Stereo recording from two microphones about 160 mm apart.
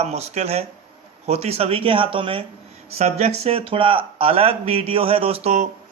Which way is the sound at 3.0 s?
45° right (ahead or behind).